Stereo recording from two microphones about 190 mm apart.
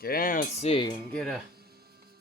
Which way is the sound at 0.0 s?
50° left (ahead or behind).